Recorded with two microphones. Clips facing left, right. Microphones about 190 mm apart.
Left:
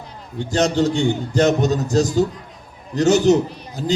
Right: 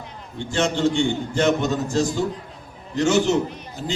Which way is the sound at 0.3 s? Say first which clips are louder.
Left 5 dB; 40° left (ahead or behind).